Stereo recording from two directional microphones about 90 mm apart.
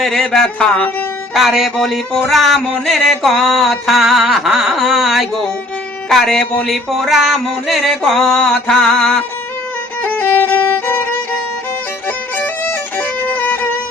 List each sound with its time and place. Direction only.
0.0 s speech: 5° left (ahead or behind)
1.3 s music: centre (ahead or behind)
10.0 s violin: 20° left (ahead or behind)
12.4 s music: 20° left (ahead or behind)